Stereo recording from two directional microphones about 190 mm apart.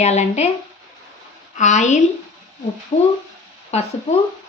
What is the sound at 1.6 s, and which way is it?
A woman's voice, 40° left (ahead or behind).